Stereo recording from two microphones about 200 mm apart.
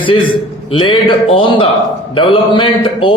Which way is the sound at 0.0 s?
25° left (ahead or behind).